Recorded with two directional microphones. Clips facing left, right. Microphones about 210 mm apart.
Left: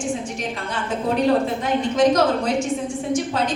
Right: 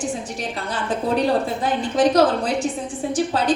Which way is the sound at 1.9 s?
35° right (ahead or behind).